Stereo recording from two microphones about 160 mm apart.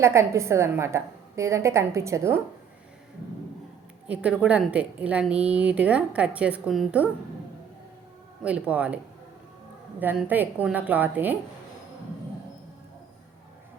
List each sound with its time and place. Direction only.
0.0 s speech: 15° right (ahead or behind)
4.1 s speech: 10° right (ahead or behind)
8.4 s speech: 10° right (ahead or behind)
10.0 s speech: 10° right (ahead or behind)